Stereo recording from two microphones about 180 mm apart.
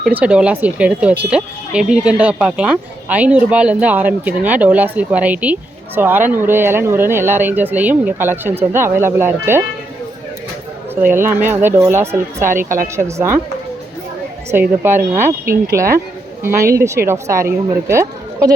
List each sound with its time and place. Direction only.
0.0 s speech: 10° right (ahead or behind)
11.0 s speech: 10° right (ahead or behind)
12.6 s a woman's voice: 50° right (ahead or behind)
13.0 s speech: 15° right (ahead or behind)
14.5 s speech: 10° right (ahead or behind)